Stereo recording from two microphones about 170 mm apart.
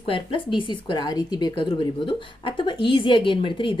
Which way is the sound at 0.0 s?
30° left (ahead or behind).